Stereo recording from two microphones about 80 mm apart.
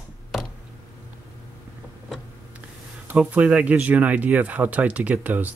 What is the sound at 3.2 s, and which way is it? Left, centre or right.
Speech, centre.